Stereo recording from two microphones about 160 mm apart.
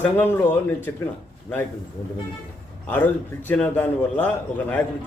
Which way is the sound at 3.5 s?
10° left (ahead or behind).